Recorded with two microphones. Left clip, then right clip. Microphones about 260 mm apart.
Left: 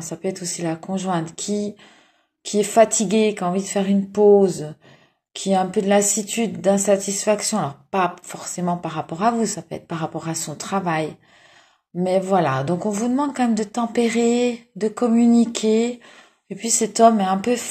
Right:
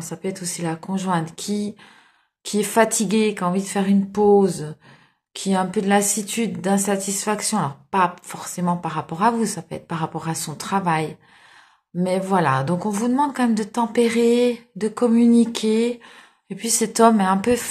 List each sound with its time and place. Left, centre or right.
0.2 s a woman's voice: centre